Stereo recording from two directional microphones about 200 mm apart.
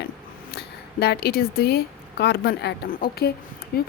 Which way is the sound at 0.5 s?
55° left (ahead or behind).